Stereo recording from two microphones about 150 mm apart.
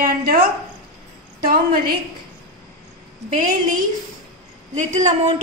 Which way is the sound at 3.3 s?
65° right (ahead or behind).